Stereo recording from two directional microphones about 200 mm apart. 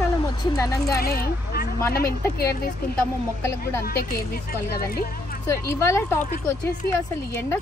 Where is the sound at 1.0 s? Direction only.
50° left (ahead or behind).